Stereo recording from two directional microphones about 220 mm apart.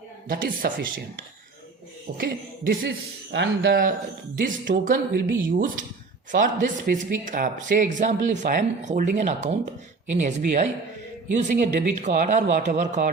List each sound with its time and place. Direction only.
0.3 s a man's voice: 40° right (ahead or behind)
2.1 s a man's voice: 40° right (ahead or behind)
3.3 s a man's voice: 50° right (ahead or behind); by 13.1 s 35° right (ahead or behind)